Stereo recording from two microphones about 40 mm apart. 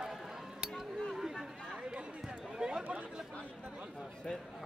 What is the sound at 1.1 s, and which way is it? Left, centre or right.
Chatter, centre.